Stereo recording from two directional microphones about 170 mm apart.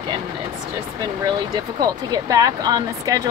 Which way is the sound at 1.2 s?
20° right (ahead or behind).